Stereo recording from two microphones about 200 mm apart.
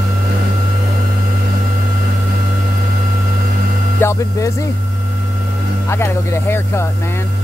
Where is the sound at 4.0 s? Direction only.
15° left (ahead or behind).